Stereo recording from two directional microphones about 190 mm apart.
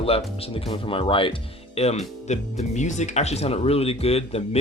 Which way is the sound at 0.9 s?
30° left (ahead or behind).